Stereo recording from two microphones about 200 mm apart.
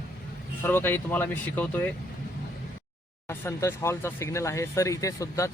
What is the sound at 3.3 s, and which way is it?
Speech, 15° left (ahead or behind).